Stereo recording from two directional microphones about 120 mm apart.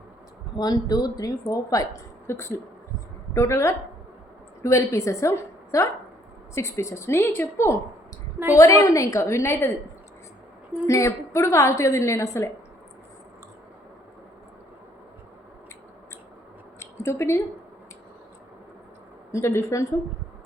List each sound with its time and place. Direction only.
0.5 s a woman's voice: 35° left (ahead or behind)
10.8 s a woman's voice: 25° left (ahead or behind)
16.8 s a sound: 20° left (ahead or behind)
19.3 s a woman's voice: 25° left (ahead or behind)